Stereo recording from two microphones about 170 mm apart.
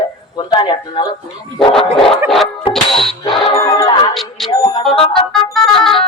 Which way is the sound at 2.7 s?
30° left (ahead or behind).